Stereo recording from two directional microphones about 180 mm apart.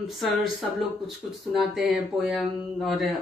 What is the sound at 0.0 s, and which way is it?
Speech, centre (ahead or behind).